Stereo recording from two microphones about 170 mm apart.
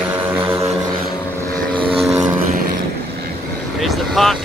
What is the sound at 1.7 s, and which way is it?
Vehicle, 30° right (ahead or behind).